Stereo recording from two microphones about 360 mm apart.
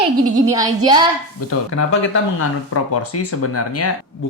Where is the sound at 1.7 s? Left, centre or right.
Left.